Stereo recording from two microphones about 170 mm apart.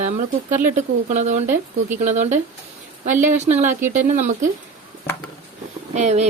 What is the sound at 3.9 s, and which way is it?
Speech, 45° right (ahead or behind).